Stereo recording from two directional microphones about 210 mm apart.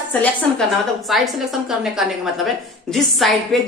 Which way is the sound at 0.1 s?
5° left (ahead or behind).